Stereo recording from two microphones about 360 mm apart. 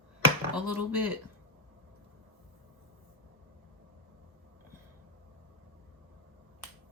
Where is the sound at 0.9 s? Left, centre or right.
Left.